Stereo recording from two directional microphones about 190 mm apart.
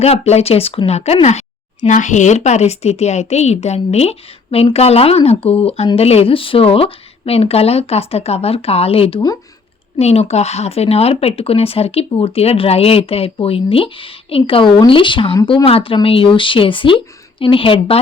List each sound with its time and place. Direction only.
0.0 s a woman's voice: 35° left (ahead or behind)